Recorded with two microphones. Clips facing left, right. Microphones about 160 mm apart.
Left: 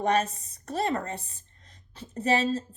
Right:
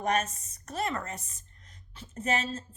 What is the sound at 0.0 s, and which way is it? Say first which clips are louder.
A woman's voice: left 4 dB; 35° left (ahead or behind).